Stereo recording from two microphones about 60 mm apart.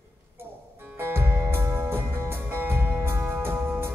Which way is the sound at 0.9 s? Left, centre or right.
Right.